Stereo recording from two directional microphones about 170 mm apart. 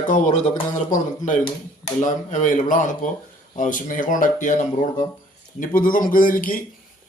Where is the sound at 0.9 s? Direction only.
50° left (ahead or behind).